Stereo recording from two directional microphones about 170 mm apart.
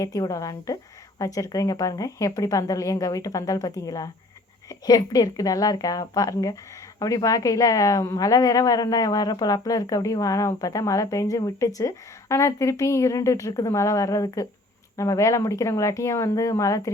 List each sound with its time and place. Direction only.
0.0 s a woman's voice: 20° left (ahead or behind)